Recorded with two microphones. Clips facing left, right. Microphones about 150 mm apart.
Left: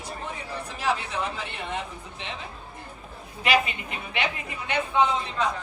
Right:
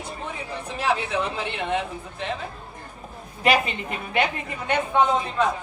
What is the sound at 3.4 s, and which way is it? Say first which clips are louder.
A woman's voice: right 3 dB; 40° right (ahead or behind).